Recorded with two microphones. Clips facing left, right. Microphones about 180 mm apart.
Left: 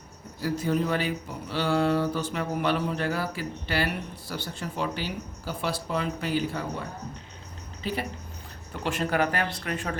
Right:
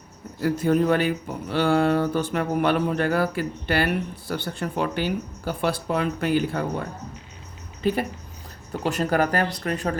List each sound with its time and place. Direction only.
0.4 s speech: 55° right (ahead or behind)
7.8 s speech: 50° right (ahead or behind)
8.7 s speech: 40° right (ahead or behind)